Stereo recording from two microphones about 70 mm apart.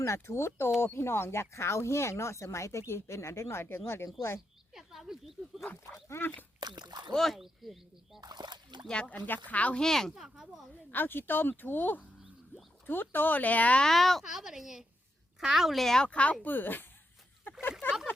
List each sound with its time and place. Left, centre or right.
0.0 s speech: left
4.7 s a sound: centre
5.7 s speech: left
6.6 s speech: right
7.1 s speech: centre
8.2 s splash: right
8.9 s speech: centre
9.8 s speech: centre
10.1 s speech: centre
10.9 s speech: left
13.8 s speech: centre
16.0 s speech: centre
17.4 s a sound: left